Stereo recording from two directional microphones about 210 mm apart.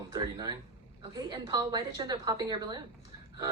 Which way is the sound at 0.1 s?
20° right (ahead or behind).